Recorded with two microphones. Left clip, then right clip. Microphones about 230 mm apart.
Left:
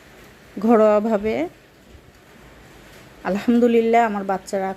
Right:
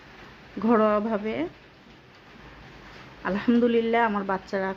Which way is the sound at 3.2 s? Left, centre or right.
Centre.